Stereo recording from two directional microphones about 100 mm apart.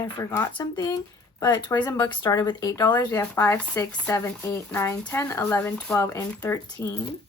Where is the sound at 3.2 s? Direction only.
20° left (ahead or behind).